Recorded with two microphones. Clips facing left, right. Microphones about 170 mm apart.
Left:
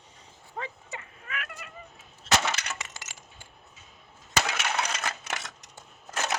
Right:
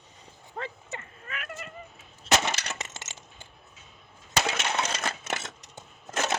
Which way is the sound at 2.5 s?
30° right (ahead or behind).